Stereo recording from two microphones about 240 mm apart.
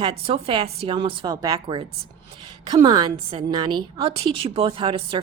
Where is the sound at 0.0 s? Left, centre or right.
Right.